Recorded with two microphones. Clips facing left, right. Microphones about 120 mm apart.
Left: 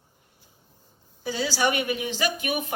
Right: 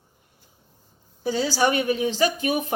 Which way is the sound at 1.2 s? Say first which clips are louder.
Right 3 dB; 35° right (ahead or behind).